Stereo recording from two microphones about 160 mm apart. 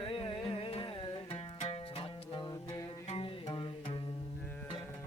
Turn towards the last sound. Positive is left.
turn(degrees=30)  # may be behind; listen again after turning